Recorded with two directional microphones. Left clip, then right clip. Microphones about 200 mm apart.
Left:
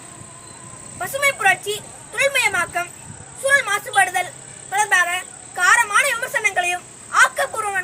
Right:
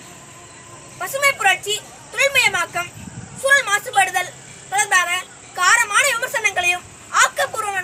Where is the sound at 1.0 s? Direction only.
Centre (ahead or behind).